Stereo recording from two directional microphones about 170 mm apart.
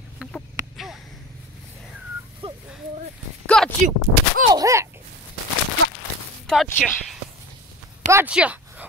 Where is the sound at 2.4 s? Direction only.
30° right (ahead or behind).